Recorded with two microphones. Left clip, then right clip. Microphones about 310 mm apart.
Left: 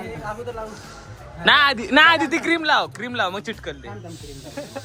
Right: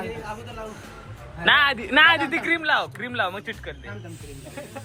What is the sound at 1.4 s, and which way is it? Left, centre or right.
Speech, centre.